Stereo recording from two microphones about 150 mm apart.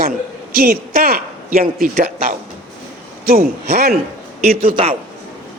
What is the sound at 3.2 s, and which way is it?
Speech, 80° right.